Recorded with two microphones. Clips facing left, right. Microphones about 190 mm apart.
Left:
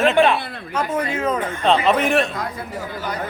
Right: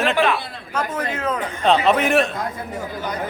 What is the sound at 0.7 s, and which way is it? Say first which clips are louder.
A man's voice: left 2 dB; 10° left (ahead or behind).